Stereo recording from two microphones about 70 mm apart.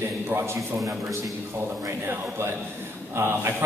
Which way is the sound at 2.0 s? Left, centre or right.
Right.